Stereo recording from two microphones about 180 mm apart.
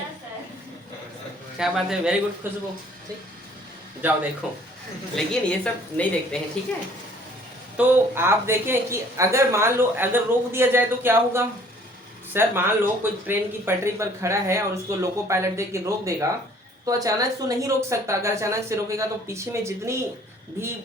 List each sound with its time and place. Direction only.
1.5 s a woman's voice: 5° right (ahead or behind)
4.0 s a woman's voice: 10° right (ahead or behind)
7.8 s a woman's voice: 10° right (ahead or behind)